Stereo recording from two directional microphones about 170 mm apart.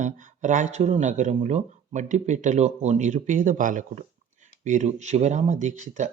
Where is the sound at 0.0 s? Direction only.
45° right (ahead or behind).